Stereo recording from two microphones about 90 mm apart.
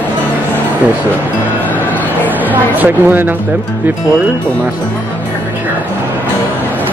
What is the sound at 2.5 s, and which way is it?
Speech, 20° right (ahead or behind).